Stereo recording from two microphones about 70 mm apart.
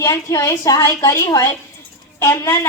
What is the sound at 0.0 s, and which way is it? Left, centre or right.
Speech, left.